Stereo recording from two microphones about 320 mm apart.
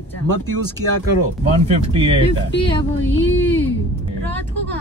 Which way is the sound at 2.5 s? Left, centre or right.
Left.